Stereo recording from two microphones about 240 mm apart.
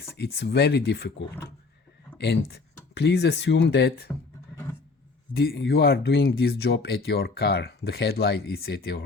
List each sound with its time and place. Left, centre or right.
0.2 s speech: left
2.1 s speech: left
5.3 s speech: left